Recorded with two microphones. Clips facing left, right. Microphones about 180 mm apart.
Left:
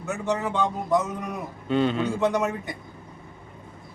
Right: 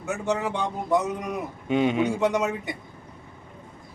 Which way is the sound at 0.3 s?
15° right (ahead or behind).